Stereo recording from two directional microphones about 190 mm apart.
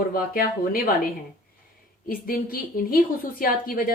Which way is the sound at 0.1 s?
50° left (ahead or behind).